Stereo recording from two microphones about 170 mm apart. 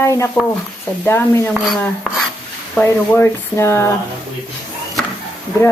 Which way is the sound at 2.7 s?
10° left (ahead or behind).